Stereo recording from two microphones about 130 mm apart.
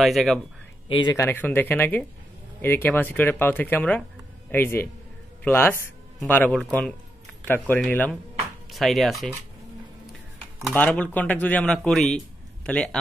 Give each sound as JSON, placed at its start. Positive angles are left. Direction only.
{"t": 0.0, "sound": "speech", "side_deg": 0}
{"t": 0.8, "sound": "speech", "side_deg": 40}
{"t": 1.1, "sound": "speech", "side_deg": 20}
{"t": 8.7, "sound": "speech", "side_deg": 0}
{"t": 10.7, "sound": "a man's voice", "side_deg": 10}